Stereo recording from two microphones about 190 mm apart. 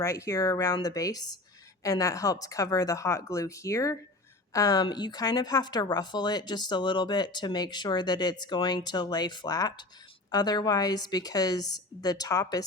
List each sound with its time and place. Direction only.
0.0 s a woman's voice: 15° left (ahead or behind)